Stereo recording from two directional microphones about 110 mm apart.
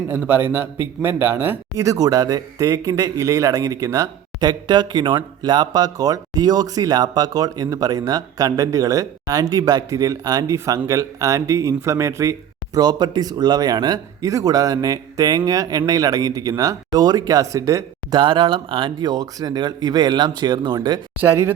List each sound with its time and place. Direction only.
0.2 s a man's voice: 20° right (ahead or behind)
18.2 s a man's voice: 45° right (ahead or behind)
21.2 s speech: 20° right (ahead or behind)